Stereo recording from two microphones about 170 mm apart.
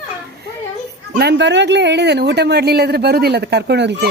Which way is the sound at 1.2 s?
85° right.